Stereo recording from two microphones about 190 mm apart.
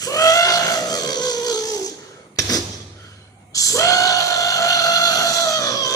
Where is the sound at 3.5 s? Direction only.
15° left (ahead or behind).